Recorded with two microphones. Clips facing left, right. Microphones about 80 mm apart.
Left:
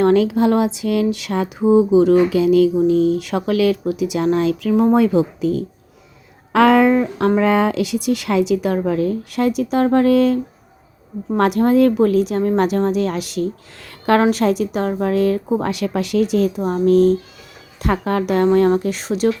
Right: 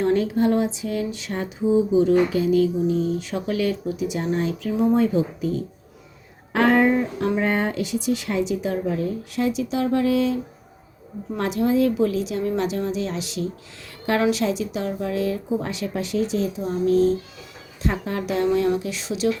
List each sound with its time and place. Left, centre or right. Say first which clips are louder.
0.0 s a sound: left 6 dB; left
6.5 s a woman's voice: left 6 dB; left
15.6 s a woman's voice: left 7 dB; left